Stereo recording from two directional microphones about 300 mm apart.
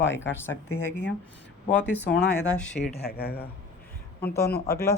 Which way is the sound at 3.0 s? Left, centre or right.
Left.